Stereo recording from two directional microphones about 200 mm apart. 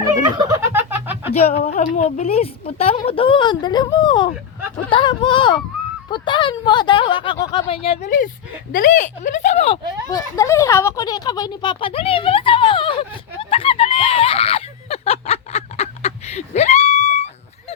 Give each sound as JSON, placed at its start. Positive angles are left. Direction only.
{"t": 0.3, "sound": "a sound", "side_deg": -15}
{"t": 1.3, "sound": "a woman's voice", "side_deg": 30}
{"t": 8.7, "sound": "speech", "side_deg": 40}
{"t": 10.1, "sound": "speech", "side_deg": 15}